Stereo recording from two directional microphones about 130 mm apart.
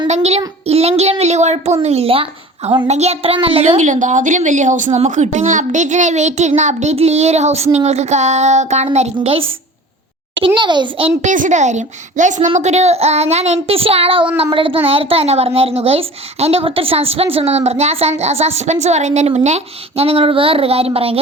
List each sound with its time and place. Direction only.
0.1 s a child's voice: 55° right (ahead or behind)
3.8 s a child's voice: 70° right (ahead or behind)
4.9 s a child's voice: 60° right (ahead or behind)
9.1 s a woman's voice: 45° right (ahead or behind)
10.4 s a child's voice: 40° right (ahead or behind)
11.2 s a child's voice: 75° right (ahead or behind); by 21.2 s 50° right (ahead or behind)